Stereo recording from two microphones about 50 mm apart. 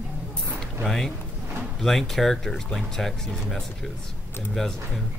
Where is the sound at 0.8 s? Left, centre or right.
Centre.